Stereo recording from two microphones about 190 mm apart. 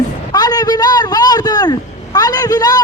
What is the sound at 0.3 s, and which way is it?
Vehicle, 20° left (ahead or behind).